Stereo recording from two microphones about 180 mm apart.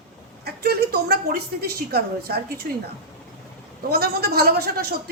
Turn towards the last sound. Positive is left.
turn(degrees=-60)  # may be behind; listen again after turning